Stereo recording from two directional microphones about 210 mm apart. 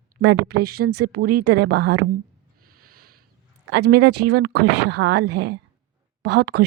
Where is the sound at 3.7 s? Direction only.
55° right (ahead or behind).